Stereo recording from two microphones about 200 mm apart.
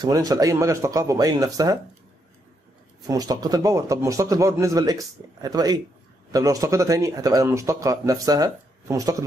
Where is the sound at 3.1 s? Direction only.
20° right (ahead or behind).